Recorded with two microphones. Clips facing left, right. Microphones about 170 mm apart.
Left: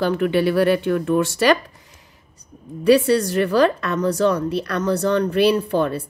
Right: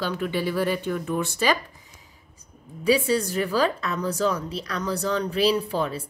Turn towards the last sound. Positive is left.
turn(degrees=65)  # may be behind; listen again after turning